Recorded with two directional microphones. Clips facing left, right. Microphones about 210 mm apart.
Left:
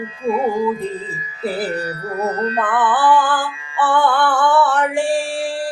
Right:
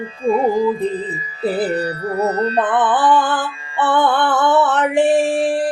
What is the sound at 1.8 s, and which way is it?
Music, 30° right (ahead or behind).